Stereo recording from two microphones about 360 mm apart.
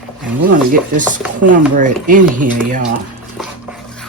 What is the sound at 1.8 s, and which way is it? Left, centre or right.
Speech, right.